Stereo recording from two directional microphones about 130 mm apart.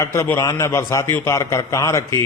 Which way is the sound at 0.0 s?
20° left (ahead or behind).